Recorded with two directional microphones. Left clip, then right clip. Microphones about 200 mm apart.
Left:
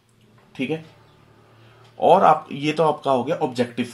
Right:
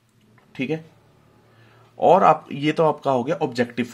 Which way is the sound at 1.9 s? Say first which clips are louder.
Even; 40° right (ahead or behind).